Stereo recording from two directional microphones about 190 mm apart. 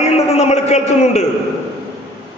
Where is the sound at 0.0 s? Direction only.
35° left (ahead or behind).